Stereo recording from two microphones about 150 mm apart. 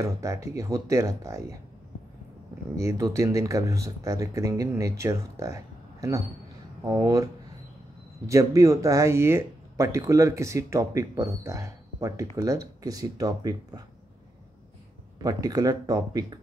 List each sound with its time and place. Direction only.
0.0 s speech: 20° right (ahead or behind)
2.8 s speech: 20° right (ahead or behind)
8.3 s speech: 20° right (ahead or behind)
15.1 s speech: 25° right (ahead or behind)